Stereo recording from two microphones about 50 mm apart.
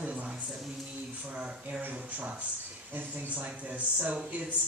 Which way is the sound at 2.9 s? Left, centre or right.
Right.